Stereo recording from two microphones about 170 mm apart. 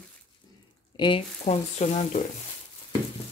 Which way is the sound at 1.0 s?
30° left (ahead or behind).